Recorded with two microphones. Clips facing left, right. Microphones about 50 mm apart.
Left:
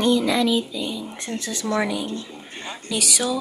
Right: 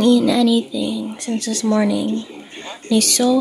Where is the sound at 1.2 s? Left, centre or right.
Left.